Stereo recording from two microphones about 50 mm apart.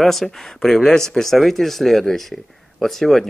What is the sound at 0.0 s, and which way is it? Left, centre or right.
Speech, centre.